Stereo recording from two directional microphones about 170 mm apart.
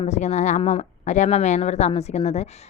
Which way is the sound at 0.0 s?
45° left (ahead or behind).